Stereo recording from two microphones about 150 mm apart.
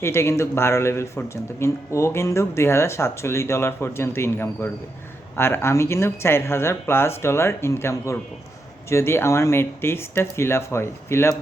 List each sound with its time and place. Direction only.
0.0 s a man's voice: 15° left (ahead or behind)